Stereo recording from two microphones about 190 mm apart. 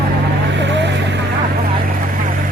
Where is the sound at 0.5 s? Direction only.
70° right (ahead or behind).